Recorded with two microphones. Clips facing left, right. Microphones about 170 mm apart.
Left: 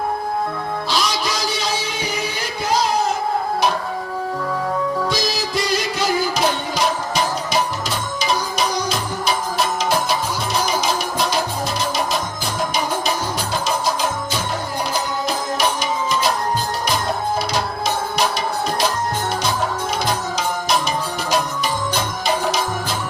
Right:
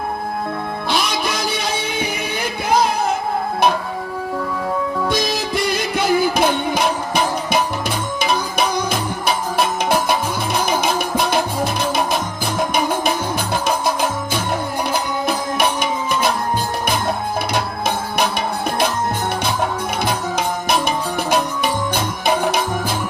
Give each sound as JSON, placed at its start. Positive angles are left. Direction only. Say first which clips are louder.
{"t": 0.9, "sound": "music", "louder": "right 2 dB", "side_deg": -55}
{"t": 5.0, "sound": "music", "louder": "right 2 dB", "side_deg": -55}
{"t": 15.5, "sound": "music", "louder": "right 1 dB", "side_deg": -55}
{"t": 17.5, "sound": "music", "louder": "right 1 dB", "side_deg": -55}
{"t": 20.1, "sound": "music", "louder": "right 1 dB", "side_deg": -55}